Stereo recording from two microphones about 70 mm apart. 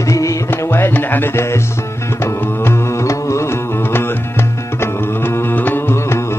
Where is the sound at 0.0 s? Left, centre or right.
Left.